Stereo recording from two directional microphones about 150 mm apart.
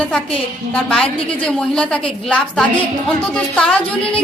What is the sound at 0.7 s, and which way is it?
A woman's voice, 10° left (ahead or behind).